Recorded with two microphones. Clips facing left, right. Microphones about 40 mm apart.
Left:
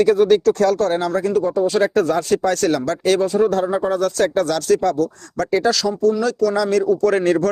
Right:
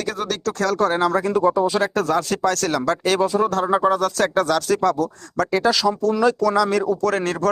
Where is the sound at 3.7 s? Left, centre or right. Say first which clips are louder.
Right 2 dB; right.